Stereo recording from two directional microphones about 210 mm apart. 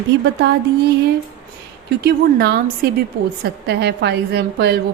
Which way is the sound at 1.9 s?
50° right (ahead or behind).